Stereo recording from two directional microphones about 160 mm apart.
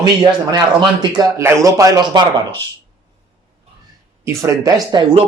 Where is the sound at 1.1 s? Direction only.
20° right (ahead or behind).